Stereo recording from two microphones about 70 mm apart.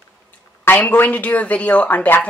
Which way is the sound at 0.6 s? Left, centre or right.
Left.